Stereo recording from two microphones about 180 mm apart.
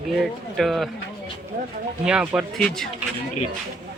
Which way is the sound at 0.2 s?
Centre (ahead or behind).